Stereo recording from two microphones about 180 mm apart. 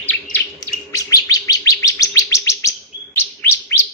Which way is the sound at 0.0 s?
10° left (ahead or behind).